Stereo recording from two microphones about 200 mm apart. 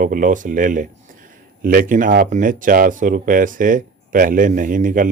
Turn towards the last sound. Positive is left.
turn(degrees=-40)  # may be behind; listen again after turning